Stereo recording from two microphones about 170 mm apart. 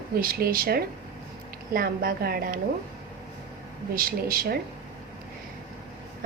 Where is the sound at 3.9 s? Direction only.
60° right (ahead or behind).